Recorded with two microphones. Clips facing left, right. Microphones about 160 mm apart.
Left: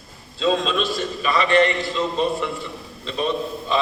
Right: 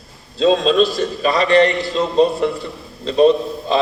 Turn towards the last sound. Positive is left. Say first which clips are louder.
# right 10 dB
turn(degrees=-35)  # may be behind; listen again after turning